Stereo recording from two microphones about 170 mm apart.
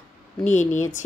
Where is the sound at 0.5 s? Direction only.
45° left (ahead or behind).